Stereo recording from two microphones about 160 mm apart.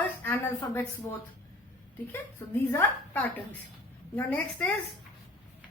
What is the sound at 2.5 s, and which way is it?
A woman's voice, 15° left (ahead or behind).